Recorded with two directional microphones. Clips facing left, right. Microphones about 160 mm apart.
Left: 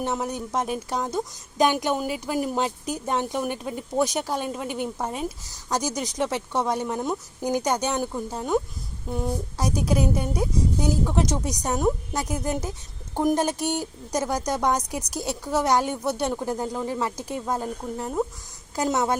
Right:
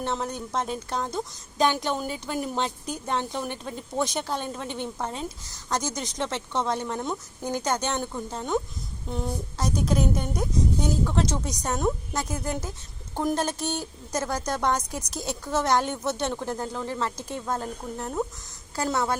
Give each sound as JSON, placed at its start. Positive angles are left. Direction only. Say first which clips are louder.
{"t": 0.0, "sound": "a woman's voice", "louder": "left 2 dB", "side_deg": 10}